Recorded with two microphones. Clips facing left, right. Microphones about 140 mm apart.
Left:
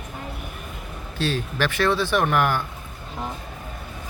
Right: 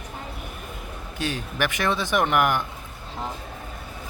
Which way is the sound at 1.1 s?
15° right (ahead or behind).